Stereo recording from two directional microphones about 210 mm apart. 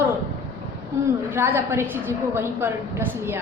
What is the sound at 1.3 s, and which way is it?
A woman's voice, 10° right (ahead or behind).